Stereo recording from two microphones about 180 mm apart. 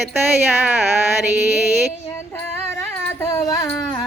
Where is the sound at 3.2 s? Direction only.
20° left (ahead or behind).